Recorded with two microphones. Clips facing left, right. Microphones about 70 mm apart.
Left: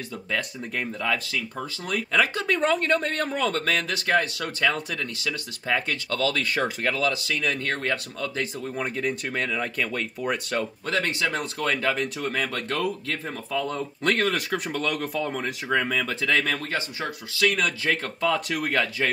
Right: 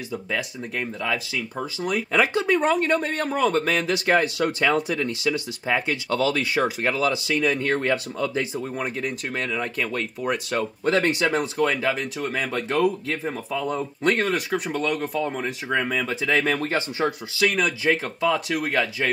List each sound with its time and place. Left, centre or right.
0.1 s speech: centre
8.8 s speech: centre
10.9 s speech: right
16.5 s speech: right
17.6 s speech: centre